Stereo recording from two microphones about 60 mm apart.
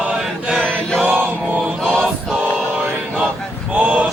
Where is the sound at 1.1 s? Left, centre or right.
Right.